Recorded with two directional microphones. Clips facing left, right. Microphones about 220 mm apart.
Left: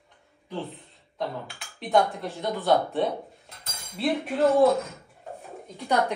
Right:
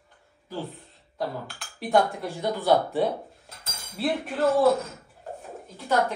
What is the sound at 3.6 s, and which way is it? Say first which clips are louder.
Cutlery: even; centre (ahead or behind).